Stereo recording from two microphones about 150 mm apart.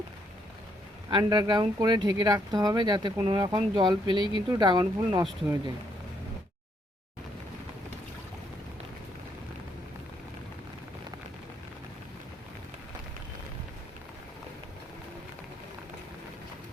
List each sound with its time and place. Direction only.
1.1 s speech: 30° right (ahead or behind)